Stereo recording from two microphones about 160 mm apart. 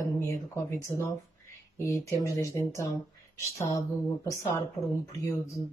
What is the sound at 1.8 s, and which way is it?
Speech, 20° left (ahead or behind).